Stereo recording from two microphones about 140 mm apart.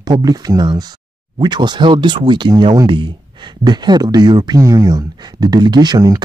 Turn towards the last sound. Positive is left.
turn(degrees=-30)  # may be behind; listen again after turning